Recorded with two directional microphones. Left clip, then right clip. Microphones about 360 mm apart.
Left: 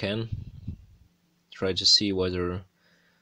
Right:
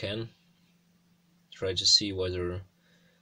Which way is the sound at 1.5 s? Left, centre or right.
Centre.